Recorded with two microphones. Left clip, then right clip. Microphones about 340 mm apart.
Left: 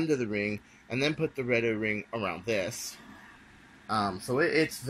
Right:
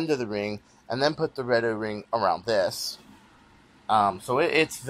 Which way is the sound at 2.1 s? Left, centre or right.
Right.